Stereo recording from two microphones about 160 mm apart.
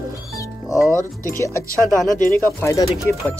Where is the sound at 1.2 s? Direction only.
15° left (ahead or behind).